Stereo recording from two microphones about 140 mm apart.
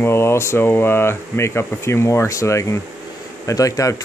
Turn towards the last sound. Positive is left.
turn(degrees=25)  # may be behind; listen again after turning